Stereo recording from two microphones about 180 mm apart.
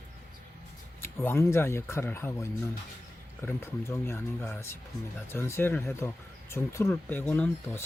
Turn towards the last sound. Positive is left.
turn(degrees=15)  # may be behind; listen again after turning